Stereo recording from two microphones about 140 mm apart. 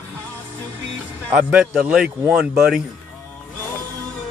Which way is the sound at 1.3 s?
10° right (ahead or behind).